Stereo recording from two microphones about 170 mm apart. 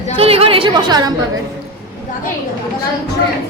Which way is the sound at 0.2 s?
35° right (ahead or behind).